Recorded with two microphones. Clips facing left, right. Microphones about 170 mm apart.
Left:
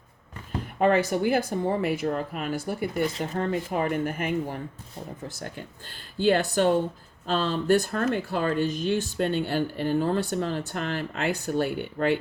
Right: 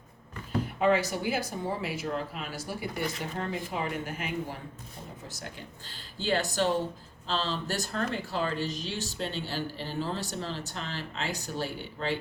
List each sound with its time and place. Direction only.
0.8 s speech: 55° left (ahead or behind)